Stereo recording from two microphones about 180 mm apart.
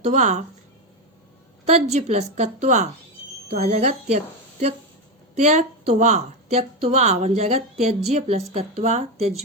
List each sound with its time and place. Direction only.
0.0 s a woman's voice: 40° right (ahead or behind)
1.6 s a woman's voice: 40° right (ahead or behind)
5.3 s a woman's voice: 40° right (ahead or behind)